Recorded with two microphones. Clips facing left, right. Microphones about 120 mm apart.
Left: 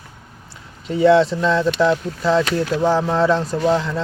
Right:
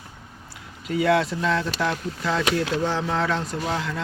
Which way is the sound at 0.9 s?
30° left (ahead or behind).